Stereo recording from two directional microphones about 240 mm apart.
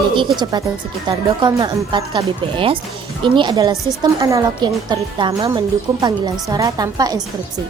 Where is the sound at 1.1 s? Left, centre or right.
Centre.